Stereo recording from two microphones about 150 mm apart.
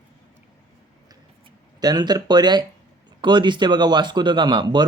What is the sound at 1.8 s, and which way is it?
A man's voice, 25° right (ahead or behind).